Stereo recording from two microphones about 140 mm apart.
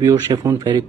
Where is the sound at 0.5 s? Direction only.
35° right (ahead or behind).